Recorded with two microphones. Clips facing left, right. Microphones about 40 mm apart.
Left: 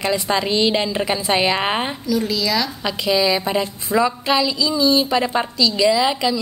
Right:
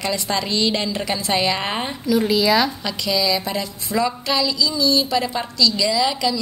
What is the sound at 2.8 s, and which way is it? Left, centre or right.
A woman's voice, left.